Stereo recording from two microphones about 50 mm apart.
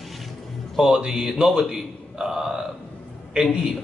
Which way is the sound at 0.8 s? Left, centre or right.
Centre.